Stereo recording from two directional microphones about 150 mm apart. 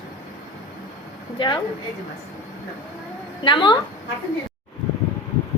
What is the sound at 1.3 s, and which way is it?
Speech, 30° left (ahead or behind).